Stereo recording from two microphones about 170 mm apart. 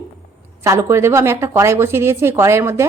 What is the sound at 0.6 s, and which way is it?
Speech, 15° right (ahead or behind).